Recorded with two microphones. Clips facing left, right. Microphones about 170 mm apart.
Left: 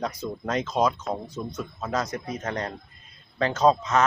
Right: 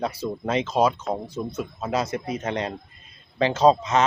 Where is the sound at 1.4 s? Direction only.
5° right (ahead or behind).